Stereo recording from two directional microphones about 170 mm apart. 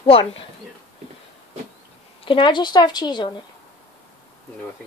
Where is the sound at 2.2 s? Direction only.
30° left (ahead or behind).